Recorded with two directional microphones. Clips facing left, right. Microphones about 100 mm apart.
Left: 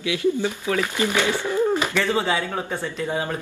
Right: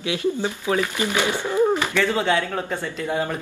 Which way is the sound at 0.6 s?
20° right (ahead or behind).